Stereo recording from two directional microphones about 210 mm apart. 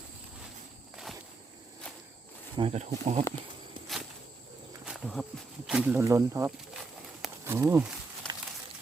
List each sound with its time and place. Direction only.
2.6 s speech: 30° right (ahead or behind)
4.9 s wild animals: centre (ahead or behind)
5.6 s speech: 5° right (ahead or behind)
7.4 s a sound: 10° right (ahead or behind)